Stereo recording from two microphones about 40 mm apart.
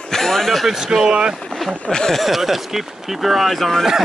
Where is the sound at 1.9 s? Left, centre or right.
Centre.